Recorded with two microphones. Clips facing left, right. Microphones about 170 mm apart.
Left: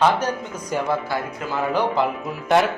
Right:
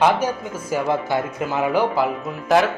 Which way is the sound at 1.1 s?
20° right (ahead or behind).